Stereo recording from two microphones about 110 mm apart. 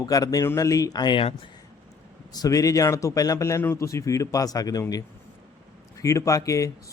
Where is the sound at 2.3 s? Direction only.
35° left (ahead or behind).